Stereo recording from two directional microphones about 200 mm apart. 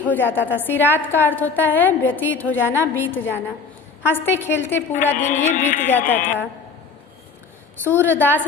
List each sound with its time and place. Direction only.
0.0 s a woman's voice: 10° left (ahead or behind)
5.1 s music: 35° left (ahead or behind)
5.8 s a woman's voice: 10° left (ahead or behind)
7.9 s a woman's voice: 10° left (ahead or behind)